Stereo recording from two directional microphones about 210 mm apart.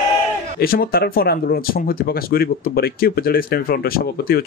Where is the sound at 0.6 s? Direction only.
45° left (ahead or behind).